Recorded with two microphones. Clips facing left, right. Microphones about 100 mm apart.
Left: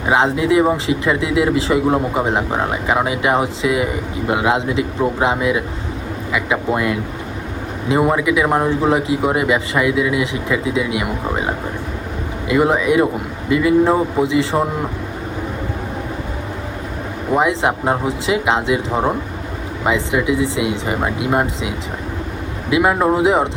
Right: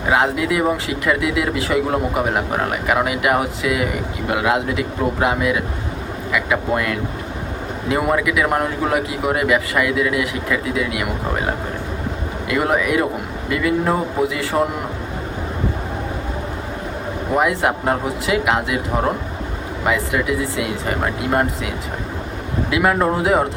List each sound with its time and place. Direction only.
0.1 s a man's voice: 25° left (ahead or behind)
17.3 s a man's voice: 25° left (ahead or behind)
22.7 s a man's voice: 20° left (ahead or behind)